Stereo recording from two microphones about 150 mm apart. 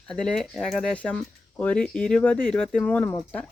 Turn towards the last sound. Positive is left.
turn(degrees=10)  # may be behind; listen again after turning